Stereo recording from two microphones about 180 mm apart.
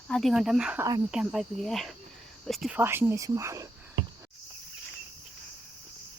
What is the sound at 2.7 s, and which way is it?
Speech, 10° right (ahead or behind).